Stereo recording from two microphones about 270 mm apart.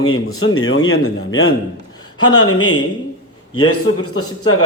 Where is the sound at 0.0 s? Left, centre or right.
Left.